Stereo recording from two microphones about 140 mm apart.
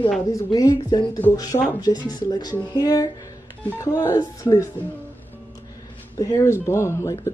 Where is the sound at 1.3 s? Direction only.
25° left (ahead or behind).